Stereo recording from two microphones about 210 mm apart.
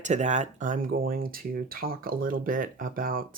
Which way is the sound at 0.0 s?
35° right (ahead or behind).